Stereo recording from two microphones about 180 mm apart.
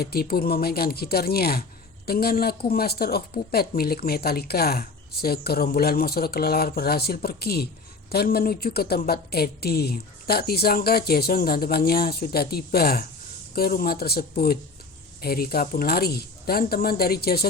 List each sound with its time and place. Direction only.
0.0 s a woman's voice: 60° left (ahead or behind)